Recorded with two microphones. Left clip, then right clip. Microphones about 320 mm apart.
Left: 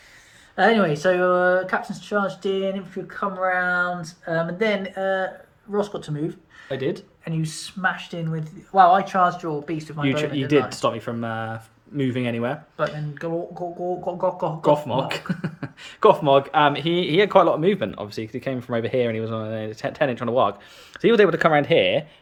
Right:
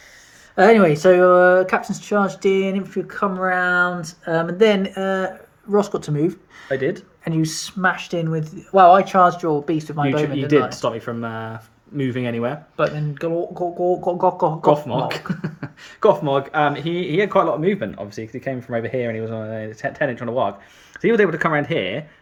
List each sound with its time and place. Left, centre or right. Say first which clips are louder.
0.5 s speech: right 6 dB; right
6.7 s speech: right 4 dB; centre
7.3 s speech: right 8 dB; right
10.8 s speech: right 1 dB; centre
13.0 s speech: right 5 dB; right
13.8 s speech: right 7 dB; right
14.2 s speech: right 4 dB; right
14.7 s speech: even; centre